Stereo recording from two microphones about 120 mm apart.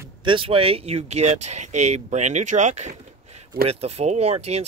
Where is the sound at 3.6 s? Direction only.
60° right (ahead or behind).